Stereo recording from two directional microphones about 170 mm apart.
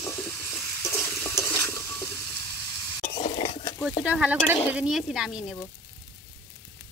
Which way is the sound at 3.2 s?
35° left (ahead or behind).